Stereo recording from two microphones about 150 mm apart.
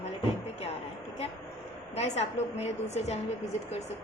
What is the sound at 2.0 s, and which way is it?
A woman's voice, 45° left (ahead or behind).